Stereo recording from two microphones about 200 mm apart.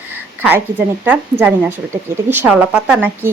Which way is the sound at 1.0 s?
10° right (ahead or behind).